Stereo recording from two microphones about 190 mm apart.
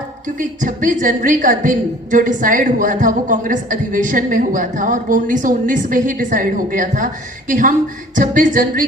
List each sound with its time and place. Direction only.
0.3 s a woman's voice: 45° right (ahead or behind)